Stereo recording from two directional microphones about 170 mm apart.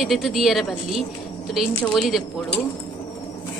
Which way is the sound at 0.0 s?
Centre (ahead or behind).